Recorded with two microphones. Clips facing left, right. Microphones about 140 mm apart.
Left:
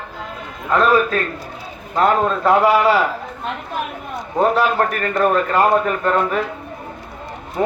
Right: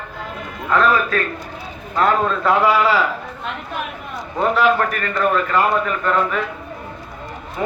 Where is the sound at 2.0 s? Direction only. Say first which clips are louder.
Left 1 dB; 30° left (ahead or behind).